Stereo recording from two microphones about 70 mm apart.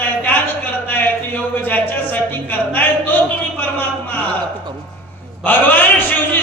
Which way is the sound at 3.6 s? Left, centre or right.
Left.